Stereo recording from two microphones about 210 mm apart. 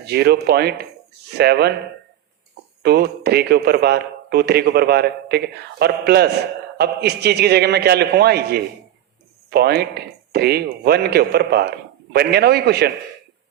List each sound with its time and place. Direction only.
0.0 s a man's voice: 50° right (ahead or behind)
2.8 s a man's voice: 50° right (ahead or behind)